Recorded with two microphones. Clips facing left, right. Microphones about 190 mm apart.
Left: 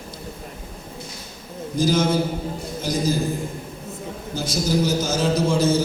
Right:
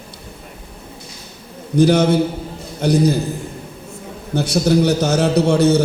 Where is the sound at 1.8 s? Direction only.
65° right (ahead or behind).